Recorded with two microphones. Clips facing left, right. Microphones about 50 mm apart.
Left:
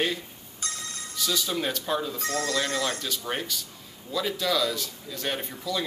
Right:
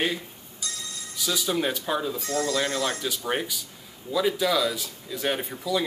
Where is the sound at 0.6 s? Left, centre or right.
Left.